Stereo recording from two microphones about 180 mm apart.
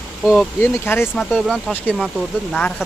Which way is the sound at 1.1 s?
Centre (ahead or behind).